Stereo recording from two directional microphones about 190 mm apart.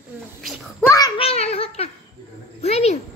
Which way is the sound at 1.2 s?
30° left (ahead or behind).